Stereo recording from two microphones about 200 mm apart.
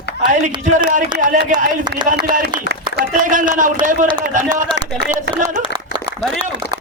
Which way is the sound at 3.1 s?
40° right (ahead or behind).